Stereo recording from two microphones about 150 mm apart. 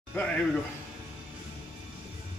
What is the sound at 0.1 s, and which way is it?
Speech, 10° left (ahead or behind).